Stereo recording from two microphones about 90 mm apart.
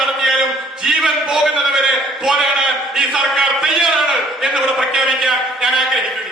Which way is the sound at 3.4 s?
5° right (ahead or behind).